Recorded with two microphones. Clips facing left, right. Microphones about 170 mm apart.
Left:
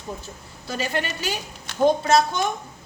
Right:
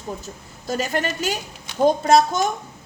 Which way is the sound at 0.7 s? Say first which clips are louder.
Right 3 dB; 45° right (ahead or behind).